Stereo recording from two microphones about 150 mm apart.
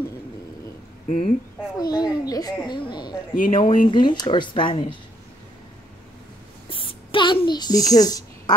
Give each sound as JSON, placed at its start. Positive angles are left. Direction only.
{"t": 1.0, "sound": "speech", "side_deg": 40}
{"t": 1.8, "sound": "a child's voice", "side_deg": 25}
{"t": 6.7, "sound": "a sound", "side_deg": 35}